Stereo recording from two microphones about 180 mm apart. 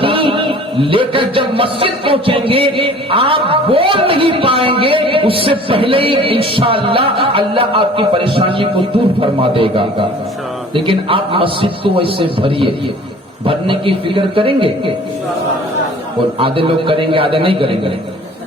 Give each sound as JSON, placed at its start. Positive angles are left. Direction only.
{"t": 0.0, "sound": "music", "side_deg": -30}
{"t": 16.4, "sound": "music", "side_deg": -30}